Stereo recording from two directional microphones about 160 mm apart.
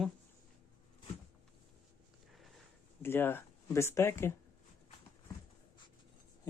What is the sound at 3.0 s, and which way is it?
Speech, 15° left (ahead or behind).